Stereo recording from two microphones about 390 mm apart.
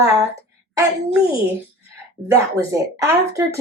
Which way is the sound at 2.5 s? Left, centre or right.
Centre.